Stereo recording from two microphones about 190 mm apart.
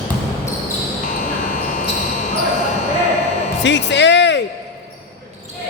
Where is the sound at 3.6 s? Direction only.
70° left (ahead or behind).